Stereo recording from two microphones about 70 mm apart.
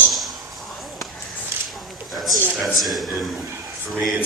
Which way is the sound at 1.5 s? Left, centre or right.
Right.